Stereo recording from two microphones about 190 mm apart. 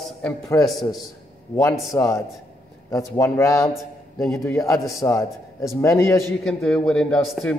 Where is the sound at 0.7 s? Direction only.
Centre (ahead or behind).